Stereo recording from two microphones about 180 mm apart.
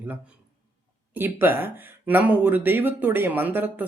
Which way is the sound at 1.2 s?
10° right (ahead or behind).